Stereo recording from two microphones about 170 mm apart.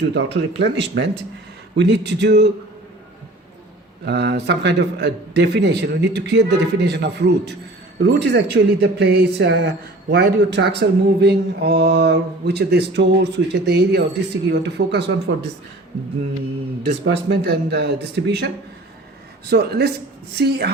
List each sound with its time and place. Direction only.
0.0 s a man's voice: 90° right
4.0 s a man's voice: 85° right
14.5 s speech: 90° right
16.9 s speech: 90° right
19.5 s speech: 70° right (ahead or behind)